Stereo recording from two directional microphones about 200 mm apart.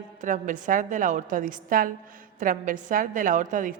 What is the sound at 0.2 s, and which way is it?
A woman's voice, 40° right (ahead or behind).